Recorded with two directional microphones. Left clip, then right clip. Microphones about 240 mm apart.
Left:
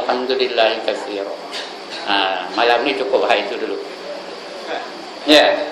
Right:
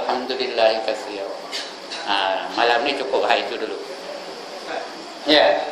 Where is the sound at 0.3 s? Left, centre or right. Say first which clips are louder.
Left 2 dB; centre.